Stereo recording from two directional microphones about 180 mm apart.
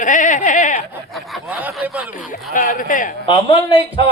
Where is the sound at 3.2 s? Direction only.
30° left (ahead or behind).